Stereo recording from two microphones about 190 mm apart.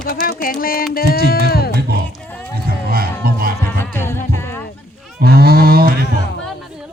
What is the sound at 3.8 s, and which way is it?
Music, 10° left (ahead or behind).